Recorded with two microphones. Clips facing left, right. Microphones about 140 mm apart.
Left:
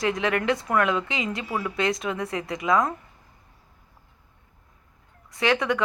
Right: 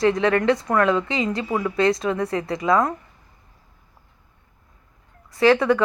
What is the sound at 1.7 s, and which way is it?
Speech, centre (ahead or behind).